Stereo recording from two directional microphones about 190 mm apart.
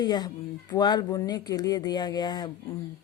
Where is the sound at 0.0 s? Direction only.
20° left (ahead or behind).